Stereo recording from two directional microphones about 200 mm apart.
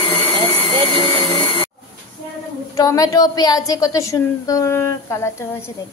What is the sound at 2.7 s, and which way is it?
A woman's voice, 15° left (ahead or behind).